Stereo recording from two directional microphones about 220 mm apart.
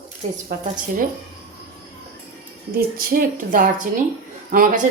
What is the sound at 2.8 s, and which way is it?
Speech, 40° right (ahead or behind).